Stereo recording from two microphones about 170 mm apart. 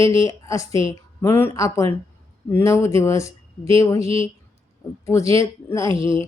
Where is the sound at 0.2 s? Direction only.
20° left (ahead or behind).